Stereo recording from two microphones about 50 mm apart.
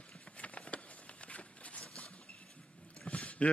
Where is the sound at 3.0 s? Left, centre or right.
Left.